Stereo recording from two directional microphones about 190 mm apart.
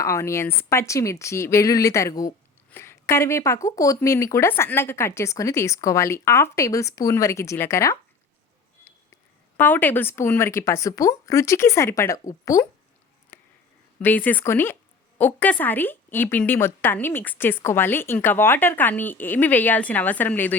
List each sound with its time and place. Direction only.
0.0 s a woman's voice: 15° left (ahead or behind)
9.6 s a woman's voice: 10° left (ahead or behind)
13.3 s a sound: 10° left (ahead or behind)
14.0 s a woman's voice: 10° left (ahead or behind)